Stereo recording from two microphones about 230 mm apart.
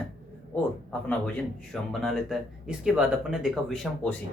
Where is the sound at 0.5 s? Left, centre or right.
Centre.